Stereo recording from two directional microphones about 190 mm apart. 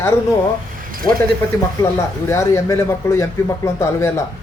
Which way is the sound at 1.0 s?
20° left (ahead or behind).